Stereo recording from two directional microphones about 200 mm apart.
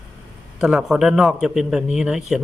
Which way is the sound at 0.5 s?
5° right (ahead or behind).